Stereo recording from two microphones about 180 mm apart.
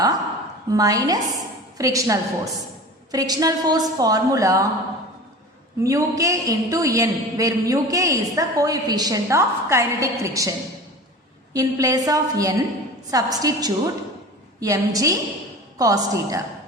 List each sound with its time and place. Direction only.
0.7 s a woman's voice: 20° right (ahead or behind)
5.8 s a man's voice: 15° right (ahead or behind)
11.5 s a woman's voice: 20° right (ahead or behind)